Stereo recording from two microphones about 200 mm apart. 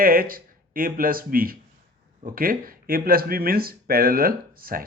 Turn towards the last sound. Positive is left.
turn(degrees=-45)  # may be behind; listen again after turning